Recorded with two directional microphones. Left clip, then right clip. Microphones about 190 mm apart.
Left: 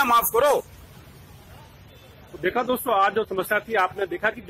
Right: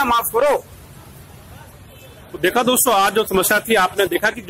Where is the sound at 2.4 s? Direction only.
15° right (ahead or behind).